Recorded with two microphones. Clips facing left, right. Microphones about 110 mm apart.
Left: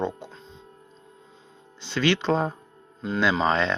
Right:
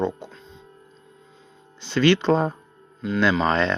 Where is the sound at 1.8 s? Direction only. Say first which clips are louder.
Right 5 dB; centre (ahead or behind).